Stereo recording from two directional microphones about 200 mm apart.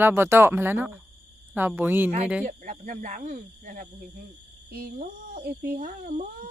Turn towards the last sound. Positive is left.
turn(degrees=-50)  # may be behind; listen again after turning